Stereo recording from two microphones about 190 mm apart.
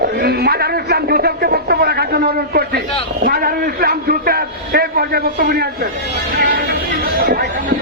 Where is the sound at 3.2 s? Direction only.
50° right (ahead or behind).